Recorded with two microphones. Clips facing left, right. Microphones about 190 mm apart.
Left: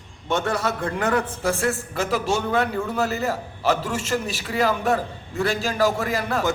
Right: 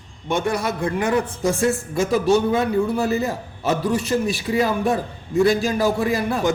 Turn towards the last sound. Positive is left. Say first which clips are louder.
# right 3 dB
turn(degrees=-15)  # may be behind; listen again after turning